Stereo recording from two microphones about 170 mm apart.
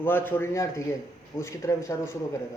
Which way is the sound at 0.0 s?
10° left (ahead or behind).